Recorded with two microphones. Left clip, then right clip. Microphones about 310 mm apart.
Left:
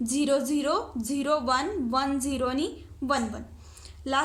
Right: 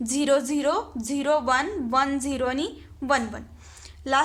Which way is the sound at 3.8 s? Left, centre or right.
Right.